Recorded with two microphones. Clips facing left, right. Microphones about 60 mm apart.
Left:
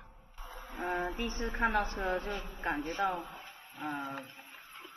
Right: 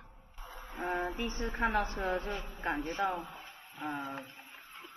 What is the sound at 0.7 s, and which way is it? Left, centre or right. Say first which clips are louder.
A man's voice: even; centre.